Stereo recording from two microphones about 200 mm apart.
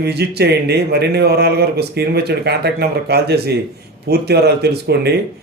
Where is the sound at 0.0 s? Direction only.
55° right (ahead or behind).